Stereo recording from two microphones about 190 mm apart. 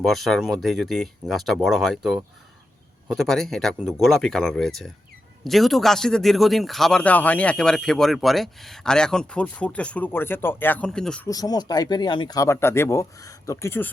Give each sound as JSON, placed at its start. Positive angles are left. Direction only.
{"t": 0.0, "sound": "speech", "side_deg": 0}
{"t": 11.3, "sound": "speech", "side_deg": 20}